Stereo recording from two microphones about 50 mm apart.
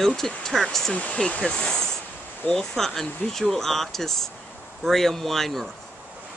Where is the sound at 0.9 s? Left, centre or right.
Left; by 5.6 s centre.